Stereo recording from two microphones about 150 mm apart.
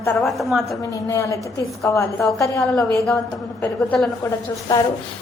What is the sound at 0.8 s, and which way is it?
A woman's voice, 20° left (ahead or behind).